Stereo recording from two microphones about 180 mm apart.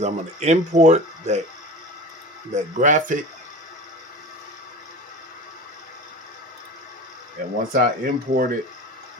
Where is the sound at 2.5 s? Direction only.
45° right (ahead or behind).